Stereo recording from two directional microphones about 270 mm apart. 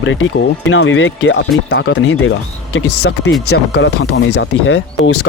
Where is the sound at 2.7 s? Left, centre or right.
Left.